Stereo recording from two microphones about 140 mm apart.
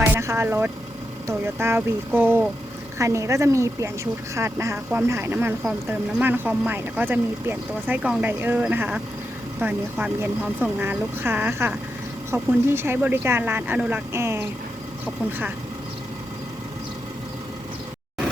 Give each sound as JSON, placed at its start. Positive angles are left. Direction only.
{"t": 0.0, "sound": "vehicle", "side_deg": -15}
{"t": 1.3, "sound": "speech", "side_deg": -20}